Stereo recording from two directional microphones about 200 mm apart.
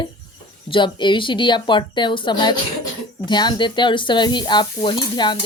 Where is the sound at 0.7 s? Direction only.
25° left (ahead or behind).